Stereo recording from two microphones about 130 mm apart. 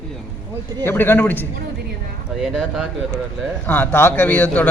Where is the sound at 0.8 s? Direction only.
15° left (ahead or behind).